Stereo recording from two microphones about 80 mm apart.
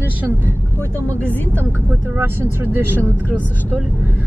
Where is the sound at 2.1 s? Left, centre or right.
Right.